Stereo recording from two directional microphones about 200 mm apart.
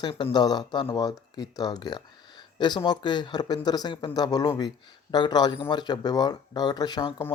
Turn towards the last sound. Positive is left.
turn(degrees=20)  # may be behind; listen again after turning